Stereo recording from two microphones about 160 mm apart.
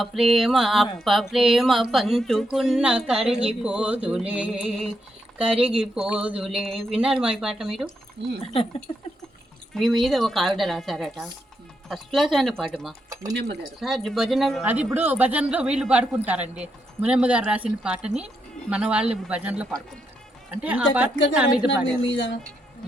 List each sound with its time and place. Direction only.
0.0 s speech: centre (ahead or behind)
8.2 s speech: 90° right
9.7 s a man's voice: centre (ahead or behind)